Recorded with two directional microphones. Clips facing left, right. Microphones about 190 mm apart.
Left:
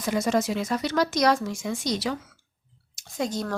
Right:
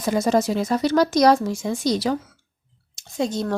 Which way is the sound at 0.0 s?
35° right (ahead or behind).